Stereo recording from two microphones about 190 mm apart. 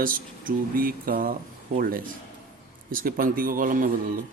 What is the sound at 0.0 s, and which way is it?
Speech, 45° right (ahead or behind).